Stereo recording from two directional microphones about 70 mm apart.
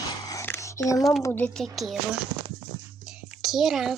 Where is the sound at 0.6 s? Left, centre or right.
Left.